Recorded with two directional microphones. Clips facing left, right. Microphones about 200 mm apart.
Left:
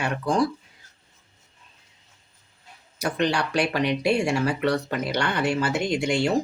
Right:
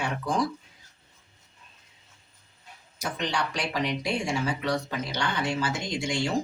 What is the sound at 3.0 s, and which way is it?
Speech, 65° left (ahead or behind).